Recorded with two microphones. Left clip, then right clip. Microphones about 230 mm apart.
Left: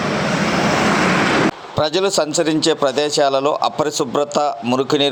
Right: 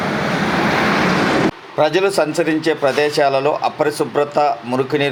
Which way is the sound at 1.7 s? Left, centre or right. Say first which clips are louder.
Right 3 dB; left.